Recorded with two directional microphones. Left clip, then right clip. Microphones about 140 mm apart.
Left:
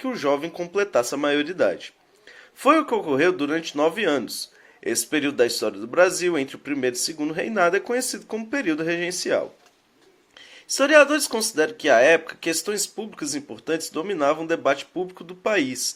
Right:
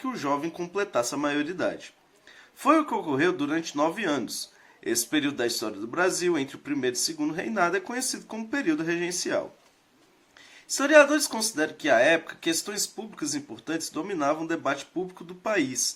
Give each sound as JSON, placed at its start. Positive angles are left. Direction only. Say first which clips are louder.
{"t": 0.0, "sound": "speech", "louder": "left 5 dB", "side_deg": 25}
{"t": 10.8, "sound": "speech", "louder": "left 3 dB", "side_deg": 30}